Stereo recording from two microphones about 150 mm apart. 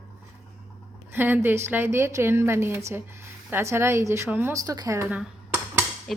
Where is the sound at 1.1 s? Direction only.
15° right (ahead or behind).